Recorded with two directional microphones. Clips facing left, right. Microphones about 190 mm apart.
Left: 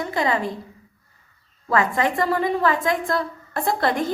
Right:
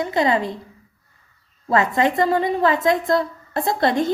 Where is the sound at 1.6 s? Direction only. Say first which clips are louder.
Right 3 dB; 25° right (ahead or behind).